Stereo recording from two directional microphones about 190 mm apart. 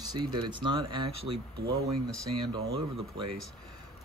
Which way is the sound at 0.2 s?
25° right (ahead or behind).